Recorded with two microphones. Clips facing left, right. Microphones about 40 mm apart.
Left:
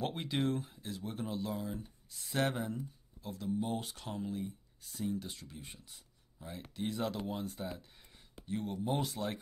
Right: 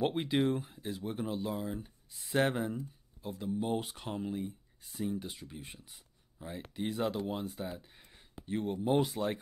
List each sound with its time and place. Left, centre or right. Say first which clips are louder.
0.0 s speech: right 5 dB; centre
8.5 s speech: right 4 dB; right